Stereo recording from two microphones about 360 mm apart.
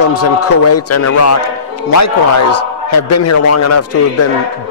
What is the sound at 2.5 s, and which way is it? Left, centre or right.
A man's voice, left.